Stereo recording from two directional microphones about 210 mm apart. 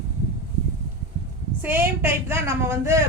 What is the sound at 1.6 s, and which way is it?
A woman's voice, 10° right (ahead or behind).